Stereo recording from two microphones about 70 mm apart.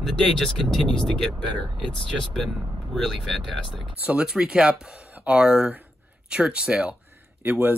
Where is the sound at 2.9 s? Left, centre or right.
Centre.